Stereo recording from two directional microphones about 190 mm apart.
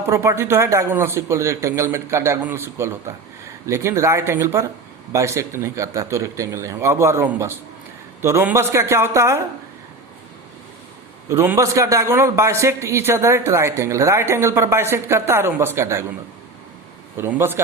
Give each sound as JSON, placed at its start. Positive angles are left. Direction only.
{"t": 0.1, "sound": "a man's voice", "side_deg": -15}
{"t": 11.3, "sound": "a man's voice", "side_deg": -15}
{"t": 17.2, "sound": "a man's voice", "side_deg": -10}